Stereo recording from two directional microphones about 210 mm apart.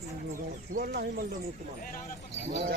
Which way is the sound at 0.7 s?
45° right (ahead or behind).